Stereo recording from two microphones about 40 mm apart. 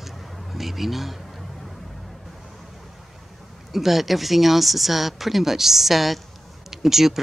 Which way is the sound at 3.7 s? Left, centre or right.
Centre.